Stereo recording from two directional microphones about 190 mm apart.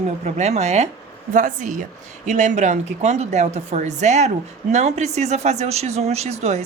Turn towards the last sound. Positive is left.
turn(degrees=-35)  # may be behind; listen again after turning